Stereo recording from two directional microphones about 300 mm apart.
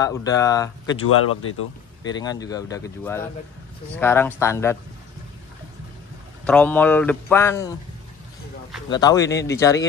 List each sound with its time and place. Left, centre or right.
0.0 s speech: centre
1.0 s speech: left
2.0 s speech: centre
6.4 s speech: centre
8.8 s speech: centre